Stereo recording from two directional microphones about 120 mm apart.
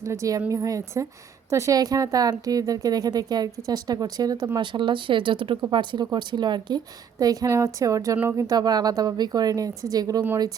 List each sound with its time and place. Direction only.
0.0 s a woman's voice: 25° right (ahead or behind)
4.5 s a woman's voice: 40° right (ahead or behind); by 8.4 s 20° right (ahead or behind)
8.4 s speech: 35° right (ahead or behind)